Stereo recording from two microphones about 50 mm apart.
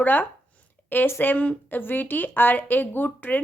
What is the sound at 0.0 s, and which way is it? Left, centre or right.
A woman's voice, left.